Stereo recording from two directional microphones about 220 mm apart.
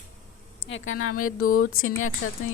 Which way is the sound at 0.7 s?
70° left (ahead or behind).